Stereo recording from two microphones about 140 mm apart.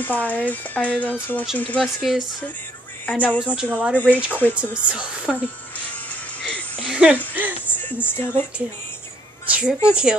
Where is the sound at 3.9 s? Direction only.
10° left (ahead or behind).